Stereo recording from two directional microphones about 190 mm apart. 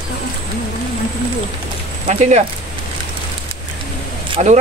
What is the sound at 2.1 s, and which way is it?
Speech, 35° right (ahead or behind).